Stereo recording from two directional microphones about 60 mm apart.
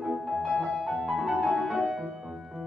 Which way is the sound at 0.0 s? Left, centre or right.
Centre.